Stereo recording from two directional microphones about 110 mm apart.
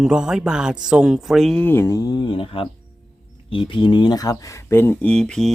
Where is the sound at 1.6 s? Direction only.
20° left (ahead or behind).